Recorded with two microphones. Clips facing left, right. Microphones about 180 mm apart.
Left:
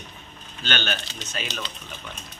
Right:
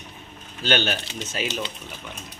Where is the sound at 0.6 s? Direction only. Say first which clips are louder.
Right 5 dB; 10° right (ahead or behind).